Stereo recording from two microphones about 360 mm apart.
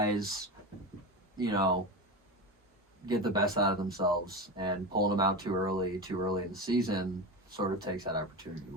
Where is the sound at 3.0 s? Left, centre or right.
Centre.